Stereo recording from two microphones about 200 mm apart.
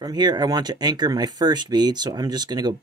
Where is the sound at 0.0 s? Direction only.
20° right (ahead or behind).